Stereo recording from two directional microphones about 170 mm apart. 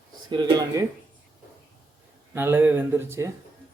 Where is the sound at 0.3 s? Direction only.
25° right (ahead or behind).